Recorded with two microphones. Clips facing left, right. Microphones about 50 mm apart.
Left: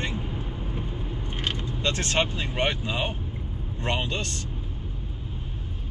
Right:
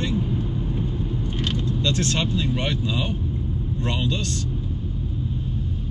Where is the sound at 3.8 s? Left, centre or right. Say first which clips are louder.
Right 1 dB; left.